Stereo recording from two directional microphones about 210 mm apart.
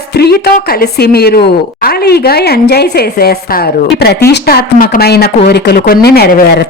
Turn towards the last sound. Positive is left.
turn(degrees=50)  # may be behind; listen again after turning